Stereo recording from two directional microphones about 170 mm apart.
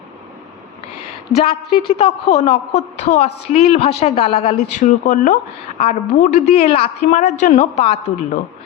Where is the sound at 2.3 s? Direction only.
40° left (ahead or behind).